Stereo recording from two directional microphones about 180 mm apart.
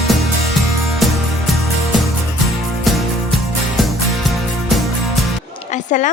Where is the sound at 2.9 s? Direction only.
Centre (ahead or behind).